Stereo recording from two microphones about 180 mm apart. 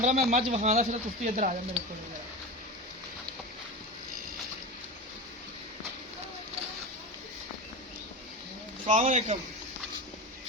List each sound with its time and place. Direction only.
0.0 s speech: 40° right (ahead or behind)
8.9 s speech: 40° right (ahead or behind)